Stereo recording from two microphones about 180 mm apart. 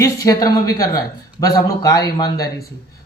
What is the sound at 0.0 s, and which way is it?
A man's voice, 20° left (ahead or behind).